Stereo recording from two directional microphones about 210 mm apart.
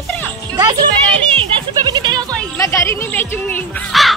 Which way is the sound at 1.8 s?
20° right (ahead or behind).